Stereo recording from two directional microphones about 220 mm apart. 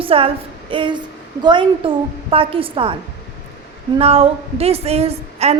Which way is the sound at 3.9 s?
25° right (ahead or behind).